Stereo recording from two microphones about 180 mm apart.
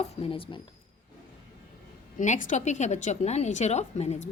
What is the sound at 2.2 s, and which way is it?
A woman's voice, 45° left (ahead or behind).